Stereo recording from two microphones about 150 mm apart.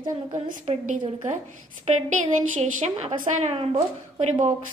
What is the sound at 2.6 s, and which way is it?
A woman's voice, 50° right (ahead or behind).